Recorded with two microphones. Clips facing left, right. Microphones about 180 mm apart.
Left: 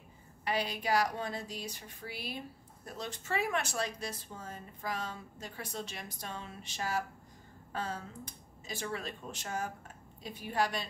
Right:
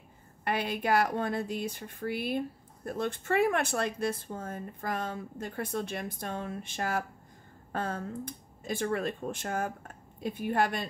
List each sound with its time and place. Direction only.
0.5 s speech: 55° right (ahead or behind)